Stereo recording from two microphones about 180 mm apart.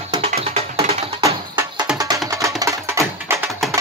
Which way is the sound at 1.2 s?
15° right (ahead or behind).